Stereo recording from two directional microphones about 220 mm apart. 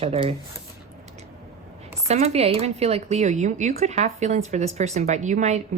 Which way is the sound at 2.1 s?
30° right (ahead or behind).